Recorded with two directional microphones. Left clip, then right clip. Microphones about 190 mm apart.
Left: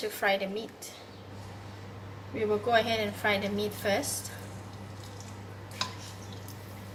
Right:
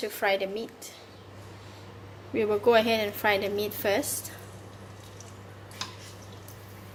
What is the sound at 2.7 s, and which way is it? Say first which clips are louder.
A woman's voice: right 5 dB; 50° right (ahead or behind).